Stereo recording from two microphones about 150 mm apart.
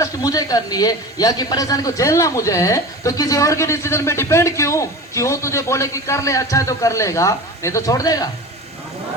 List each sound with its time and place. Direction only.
0.0 s a man's voice: 25° left (ahead or behind)